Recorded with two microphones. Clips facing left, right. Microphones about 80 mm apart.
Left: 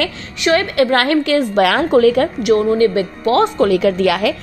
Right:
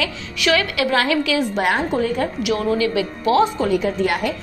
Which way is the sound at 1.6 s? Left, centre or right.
Left.